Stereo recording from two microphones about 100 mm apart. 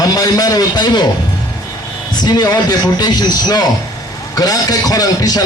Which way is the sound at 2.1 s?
45° left (ahead or behind).